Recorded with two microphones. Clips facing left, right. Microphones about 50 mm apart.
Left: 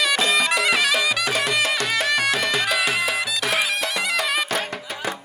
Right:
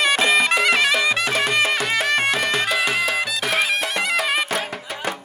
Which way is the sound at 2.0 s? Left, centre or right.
Right.